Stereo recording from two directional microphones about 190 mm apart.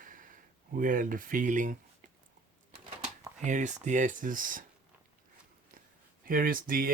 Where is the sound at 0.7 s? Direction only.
45° right (ahead or behind).